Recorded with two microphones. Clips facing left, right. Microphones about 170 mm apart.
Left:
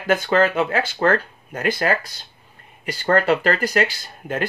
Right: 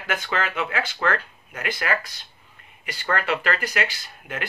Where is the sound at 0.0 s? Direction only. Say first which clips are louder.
Left 9 dB; 35° left (ahead or behind).